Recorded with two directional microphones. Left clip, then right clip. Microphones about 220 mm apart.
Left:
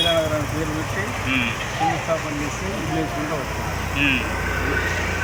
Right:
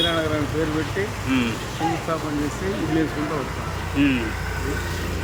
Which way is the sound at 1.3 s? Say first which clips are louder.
Left 2 dB; 15° right (ahead or behind).